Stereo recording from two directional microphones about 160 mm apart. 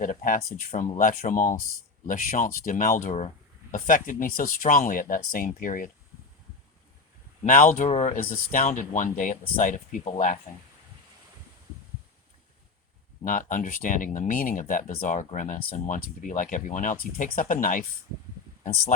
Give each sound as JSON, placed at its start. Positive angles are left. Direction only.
{"t": 0.0, "sound": "speech", "side_deg": 55}
{"t": 3.8, "sound": "speech", "side_deg": 60}
{"t": 7.4, "sound": "speech", "side_deg": 60}
{"t": 7.9, "sound": "speech", "side_deg": 40}
{"t": 8.2, "sound": "speech", "side_deg": 60}
{"t": 13.2, "sound": "speech", "side_deg": 55}